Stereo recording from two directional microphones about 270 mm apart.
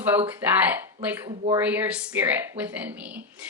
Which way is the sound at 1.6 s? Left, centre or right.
Centre.